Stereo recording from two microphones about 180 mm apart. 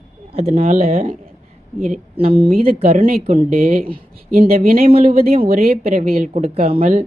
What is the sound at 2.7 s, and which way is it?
Speech, 35° right (ahead or behind).